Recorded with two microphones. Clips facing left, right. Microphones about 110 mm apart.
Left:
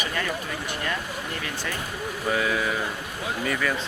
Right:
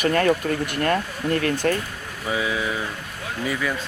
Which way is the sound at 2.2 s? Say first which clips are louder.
Right 1 dB; 5° right (ahead or behind).